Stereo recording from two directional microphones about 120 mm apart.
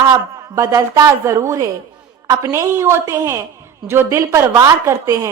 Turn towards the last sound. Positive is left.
turn(degrees=-25)  # may be behind; listen again after turning